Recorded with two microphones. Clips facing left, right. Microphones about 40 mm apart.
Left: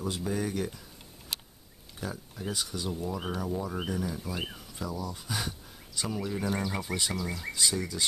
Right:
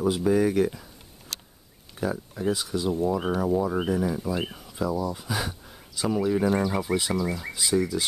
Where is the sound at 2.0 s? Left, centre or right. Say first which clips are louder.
Right 10 dB; centre.